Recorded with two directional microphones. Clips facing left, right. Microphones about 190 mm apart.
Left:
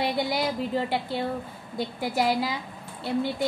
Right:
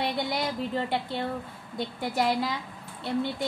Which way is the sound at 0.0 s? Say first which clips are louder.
Left 3 dB; 5° left (ahead or behind).